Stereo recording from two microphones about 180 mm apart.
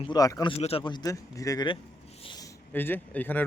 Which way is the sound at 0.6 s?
30° left (ahead or behind).